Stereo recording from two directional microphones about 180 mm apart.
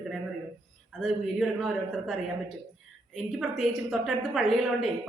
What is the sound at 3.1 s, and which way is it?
A woman's voice, centre (ahead or behind).